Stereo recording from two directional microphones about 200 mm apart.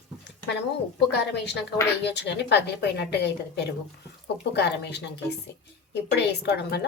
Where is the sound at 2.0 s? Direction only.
60° left (ahead or behind).